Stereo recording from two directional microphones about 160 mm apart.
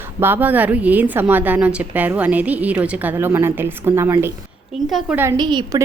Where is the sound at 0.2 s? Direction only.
10° right (ahead or behind).